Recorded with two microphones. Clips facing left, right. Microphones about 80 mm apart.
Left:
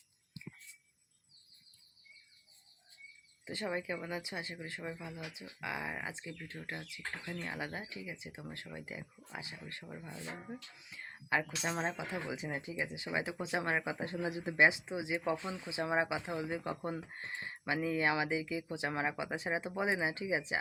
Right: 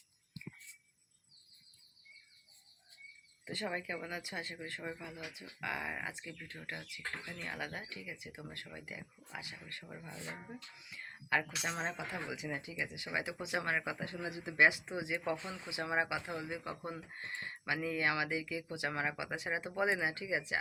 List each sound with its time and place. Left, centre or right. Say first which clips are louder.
3.4 s speech: left 2 dB; centre
9.8 s speech: left 2 dB; centre
10.8 s a sound: even; left
11.6 s speech: left 3 dB; centre
12.4 s speech: left 2 dB; left
14.5 s speech: even; left
15.7 s speech: left 2 dB; left
16.6 s speech: left 4 dB; left